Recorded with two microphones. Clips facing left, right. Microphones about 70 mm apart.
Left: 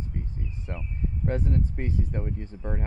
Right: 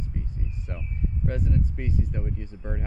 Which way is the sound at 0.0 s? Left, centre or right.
Left.